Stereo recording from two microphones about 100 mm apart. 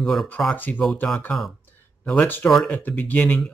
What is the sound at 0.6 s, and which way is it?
Speech, 15° left (ahead or behind).